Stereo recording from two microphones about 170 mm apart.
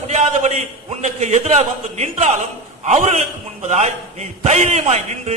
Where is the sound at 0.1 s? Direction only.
40° right (ahead or behind).